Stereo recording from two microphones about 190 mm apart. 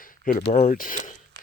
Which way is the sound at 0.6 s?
45° left (ahead or behind).